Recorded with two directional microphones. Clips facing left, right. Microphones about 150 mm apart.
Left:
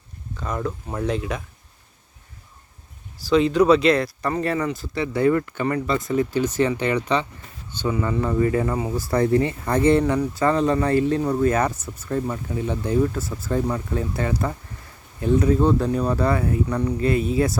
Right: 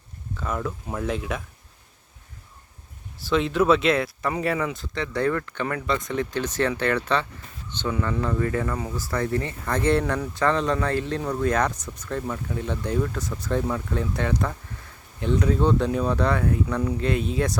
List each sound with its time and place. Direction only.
0.3 s speech: centre (ahead or behind)
3.2 s speech: centre (ahead or behind); by 9.4 s 30° left (ahead or behind)
9.4 s speech: 15° left (ahead or behind)